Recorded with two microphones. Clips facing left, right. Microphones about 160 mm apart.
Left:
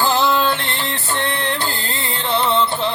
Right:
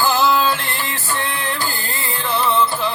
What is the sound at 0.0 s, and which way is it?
Music, 20° left (ahead or behind).